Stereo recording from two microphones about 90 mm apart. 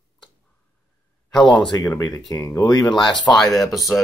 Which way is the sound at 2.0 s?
40° left (ahead or behind).